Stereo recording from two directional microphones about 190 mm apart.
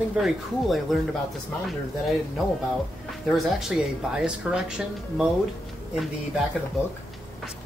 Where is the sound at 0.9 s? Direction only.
Centre (ahead or behind).